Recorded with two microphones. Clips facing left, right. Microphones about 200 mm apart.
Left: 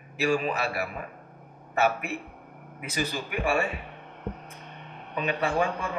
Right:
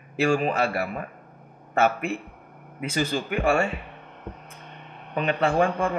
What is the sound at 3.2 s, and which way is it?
Speech, 50° right (ahead or behind).